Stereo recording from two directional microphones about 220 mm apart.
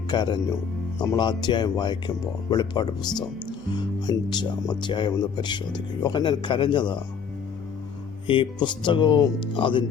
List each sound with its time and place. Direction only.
0.1 s speech: 20° left (ahead or behind)
4.0 s speech: 20° left (ahead or behind)
8.3 s speech: 20° left (ahead or behind)